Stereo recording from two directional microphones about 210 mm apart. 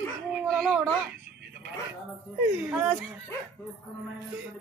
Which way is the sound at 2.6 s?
Centre (ahead or behind).